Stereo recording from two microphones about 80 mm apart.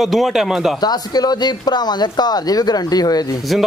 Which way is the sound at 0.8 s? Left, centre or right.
Left.